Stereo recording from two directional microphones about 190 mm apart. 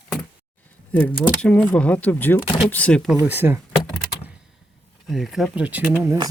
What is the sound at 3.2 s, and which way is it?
Power windows, 10° right (ahead or behind).